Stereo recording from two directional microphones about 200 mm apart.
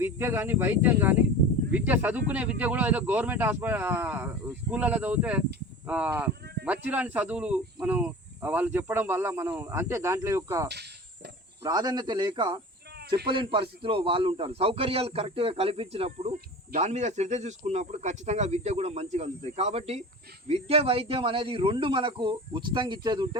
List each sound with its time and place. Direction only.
0.0 s speech: 10° right (ahead or behind)
10.7 s cricket: 55° right (ahead or behind)
11.6 s a man's voice: 20° right (ahead or behind)